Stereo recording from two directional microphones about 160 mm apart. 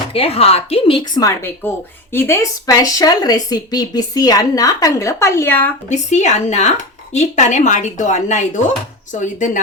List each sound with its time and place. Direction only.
0.1 s a woman's voice: 40° left (ahead or behind)
1.2 s speech: 15° left (ahead or behind)
5.9 s speech: 45° left (ahead or behind)